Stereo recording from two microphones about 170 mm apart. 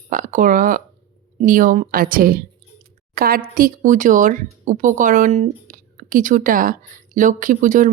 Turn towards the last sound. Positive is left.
turn(degrees=-50)  # may be behind; listen again after turning